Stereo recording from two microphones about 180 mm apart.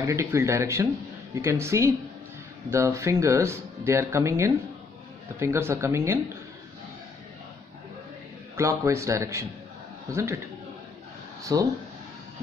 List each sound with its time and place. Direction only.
0.0 s speech: 15° right (ahead or behind)
8.5 s speech: 15° right (ahead or behind)
11.5 s speech: 20° right (ahead or behind)